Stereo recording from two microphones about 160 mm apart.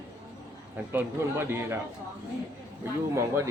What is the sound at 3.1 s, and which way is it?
Speech, 15° right (ahead or behind).